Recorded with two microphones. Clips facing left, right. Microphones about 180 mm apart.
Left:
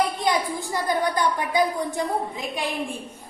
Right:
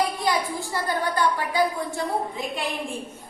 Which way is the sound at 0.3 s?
15° left (ahead or behind).